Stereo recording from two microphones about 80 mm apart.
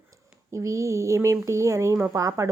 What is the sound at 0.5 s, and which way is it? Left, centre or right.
A woman's voice, right.